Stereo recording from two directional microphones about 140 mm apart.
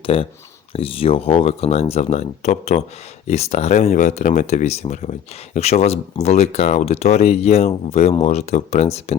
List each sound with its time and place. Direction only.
0.0 s speech: 40° left (ahead or behind)